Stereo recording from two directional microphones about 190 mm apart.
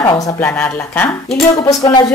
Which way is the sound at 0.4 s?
10° left (ahead or behind).